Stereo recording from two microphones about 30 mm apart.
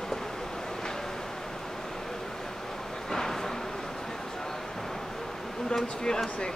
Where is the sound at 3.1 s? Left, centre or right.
Centre.